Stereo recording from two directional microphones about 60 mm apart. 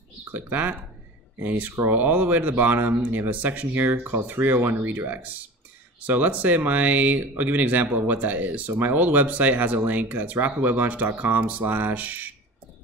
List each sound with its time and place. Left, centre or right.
0.3 s speech: right